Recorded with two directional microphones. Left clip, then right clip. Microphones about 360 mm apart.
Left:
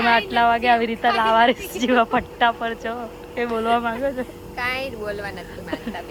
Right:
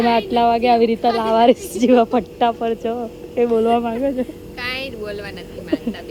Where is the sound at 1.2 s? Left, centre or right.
Centre.